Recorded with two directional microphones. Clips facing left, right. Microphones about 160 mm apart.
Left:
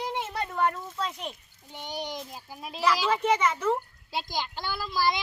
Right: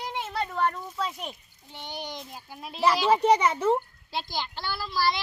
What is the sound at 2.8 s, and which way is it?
A child's voice, 35° right (ahead or behind).